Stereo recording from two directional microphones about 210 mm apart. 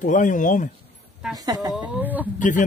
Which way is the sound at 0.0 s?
35° left (ahead or behind).